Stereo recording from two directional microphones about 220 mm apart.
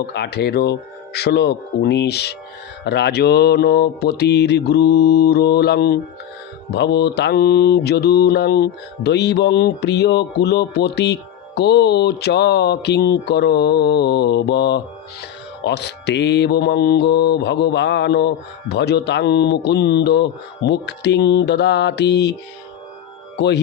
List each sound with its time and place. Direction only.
0.0 s mantra: 50° left (ahead or behind)